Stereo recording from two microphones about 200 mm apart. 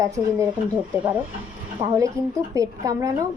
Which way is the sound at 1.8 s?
15° right (ahead or behind).